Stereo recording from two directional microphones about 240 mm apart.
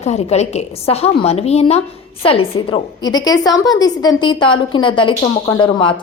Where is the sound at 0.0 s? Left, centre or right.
Left.